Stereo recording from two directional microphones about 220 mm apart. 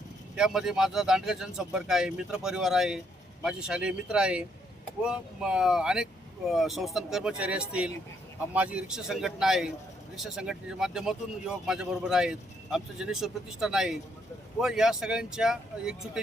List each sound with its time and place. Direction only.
0.3 s a man's voice: centre (ahead or behind)